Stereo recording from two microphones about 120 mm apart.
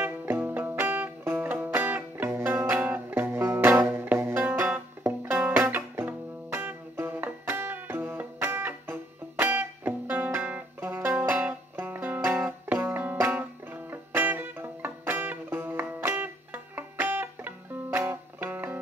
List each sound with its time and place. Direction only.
0.0 s music: 15° right (ahead or behind)